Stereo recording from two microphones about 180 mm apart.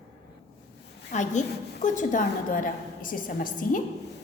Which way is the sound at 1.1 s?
40° left (ahead or behind).